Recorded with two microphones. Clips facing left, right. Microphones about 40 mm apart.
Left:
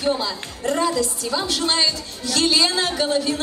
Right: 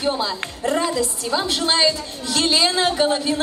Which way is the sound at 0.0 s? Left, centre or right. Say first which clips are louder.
Even; centre.